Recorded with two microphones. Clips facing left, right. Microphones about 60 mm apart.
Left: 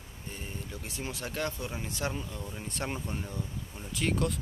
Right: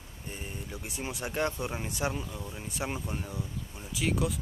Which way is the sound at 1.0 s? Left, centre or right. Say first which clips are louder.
Right 3 dB; centre.